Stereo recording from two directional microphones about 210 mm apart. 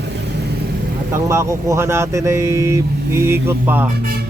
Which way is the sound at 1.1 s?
15° right (ahead or behind).